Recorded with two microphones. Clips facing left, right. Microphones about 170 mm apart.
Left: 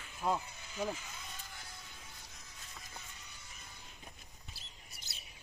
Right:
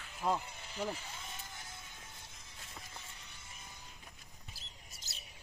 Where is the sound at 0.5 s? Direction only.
30° right (ahead or behind).